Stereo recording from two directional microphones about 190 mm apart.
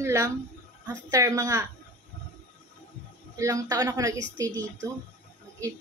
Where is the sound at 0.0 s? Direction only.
15° right (ahead or behind).